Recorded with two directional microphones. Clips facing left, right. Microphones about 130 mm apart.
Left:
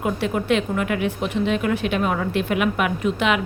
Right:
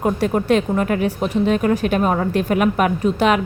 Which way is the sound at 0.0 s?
40° right (ahead or behind).